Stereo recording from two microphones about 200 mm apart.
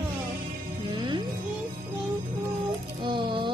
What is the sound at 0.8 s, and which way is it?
Music, 25° right (ahead or behind).